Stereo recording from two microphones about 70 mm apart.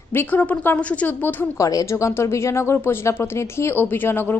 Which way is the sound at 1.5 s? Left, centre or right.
Left.